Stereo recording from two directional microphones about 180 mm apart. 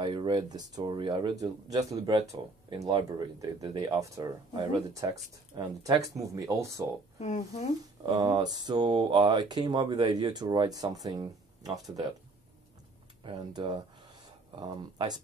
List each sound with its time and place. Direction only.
0.0 s speech: 25° right (ahead or behind)
7.2 s a woman's voice: 40° left (ahead or behind)
8.0 s speech: 20° right (ahead or behind)
13.2 s speech: 25° right (ahead or behind)